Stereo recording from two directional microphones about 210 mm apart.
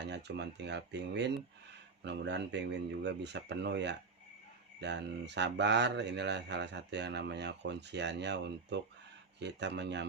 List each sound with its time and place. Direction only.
0.0 s speech: 55° right (ahead or behind)